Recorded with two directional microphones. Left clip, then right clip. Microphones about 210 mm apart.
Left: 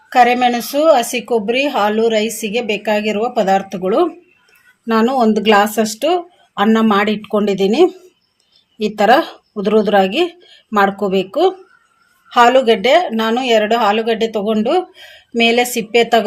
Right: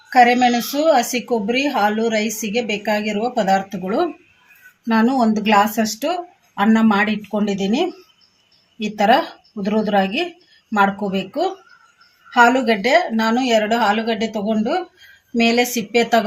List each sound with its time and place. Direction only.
0.1 s a woman's voice: 30° left (ahead or behind)